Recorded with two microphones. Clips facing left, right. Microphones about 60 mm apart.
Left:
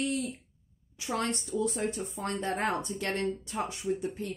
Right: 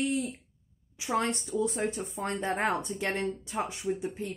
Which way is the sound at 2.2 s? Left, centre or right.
Centre.